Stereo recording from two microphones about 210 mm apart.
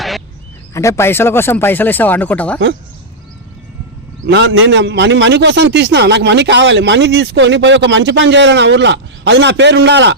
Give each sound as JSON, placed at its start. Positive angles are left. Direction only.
{"t": 0.7, "sound": "speech", "side_deg": 15}
{"t": 4.3, "sound": "a man's voice", "side_deg": -55}